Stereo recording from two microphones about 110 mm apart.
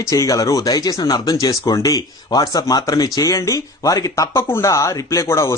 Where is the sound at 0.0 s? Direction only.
30° left (ahead or behind).